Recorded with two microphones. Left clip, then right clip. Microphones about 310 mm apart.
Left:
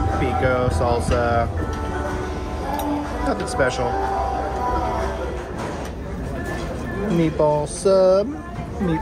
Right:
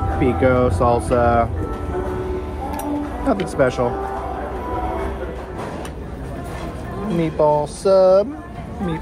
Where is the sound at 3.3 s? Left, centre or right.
Centre.